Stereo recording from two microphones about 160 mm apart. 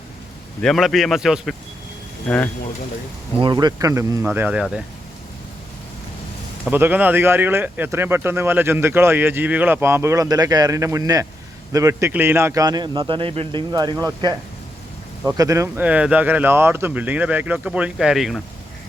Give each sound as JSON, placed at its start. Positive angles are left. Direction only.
{"t": 0.6, "sound": "speech", "side_deg": 0}
{"t": 3.4, "sound": "a man's voice", "side_deg": -25}
{"t": 4.3, "sound": "speech", "side_deg": -10}
{"t": 6.7, "sound": "a man's voice", "side_deg": -10}
{"t": 15.4, "sound": "speech", "side_deg": -20}